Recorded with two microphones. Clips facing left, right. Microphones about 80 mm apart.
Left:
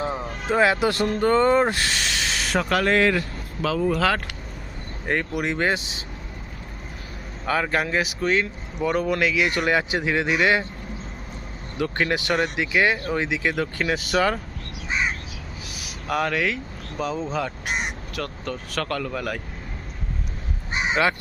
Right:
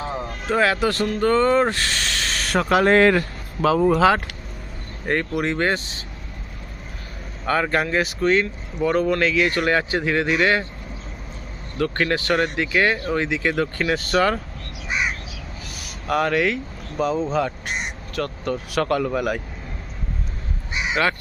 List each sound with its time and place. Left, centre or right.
0.5 s speech: centre
1.9 s snake: centre
2.8 s speech: right
3.7 s speech: right
5.0 s speech: centre
7.4 s speech: centre
11.8 s speech: centre
15.7 s a sound: centre
17.0 s speech: centre
20.9 s speech: centre